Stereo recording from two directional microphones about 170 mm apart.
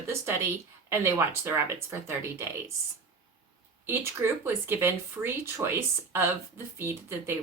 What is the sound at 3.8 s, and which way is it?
A woman's voice, 15° right (ahead or behind).